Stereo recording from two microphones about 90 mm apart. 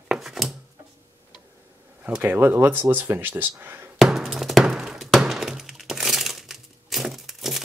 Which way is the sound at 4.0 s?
5° right (ahead or behind).